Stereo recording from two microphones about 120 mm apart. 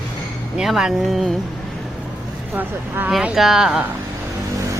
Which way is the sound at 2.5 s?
15° right (ahead or behind).